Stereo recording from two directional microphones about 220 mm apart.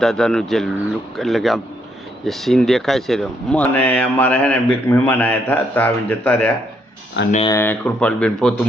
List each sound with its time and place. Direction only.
0.0 s speech: centre (ahead or behind)
7.3 s speech: 30° left (ahead or behind)
7.5 s speech: 10° left (ahead or behind)